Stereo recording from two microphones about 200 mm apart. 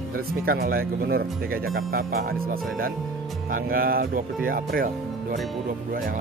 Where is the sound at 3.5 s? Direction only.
45° right (ahead or behind).